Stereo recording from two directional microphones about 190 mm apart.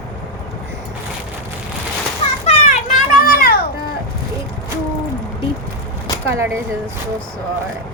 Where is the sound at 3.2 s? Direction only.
50° left (ahead or behind).